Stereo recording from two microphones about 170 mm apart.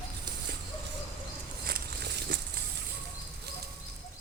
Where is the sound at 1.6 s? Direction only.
70° right (ahead or behind).